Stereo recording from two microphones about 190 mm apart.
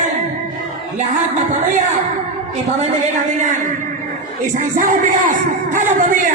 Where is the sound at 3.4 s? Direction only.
40° right (ahead or behind).